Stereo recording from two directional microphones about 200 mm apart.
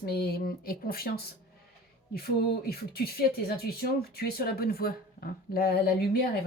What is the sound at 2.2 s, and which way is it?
Speech, 50° left (ahead or behind).